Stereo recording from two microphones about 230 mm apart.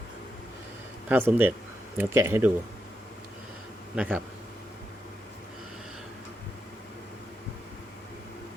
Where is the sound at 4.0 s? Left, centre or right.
Centre.